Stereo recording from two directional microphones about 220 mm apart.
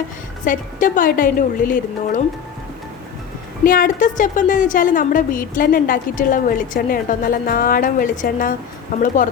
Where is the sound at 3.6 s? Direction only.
40° left (ahead or behind).